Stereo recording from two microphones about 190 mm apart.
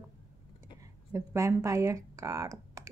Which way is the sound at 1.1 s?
15° right (ahead or behind).